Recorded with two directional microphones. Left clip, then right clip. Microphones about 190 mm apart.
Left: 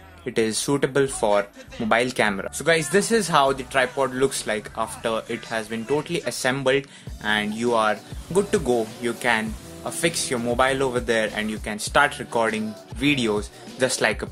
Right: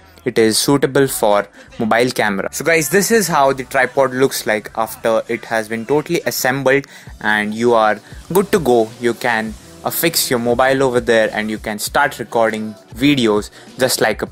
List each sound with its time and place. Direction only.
0.2 s speech: 40° right (ahead or behind)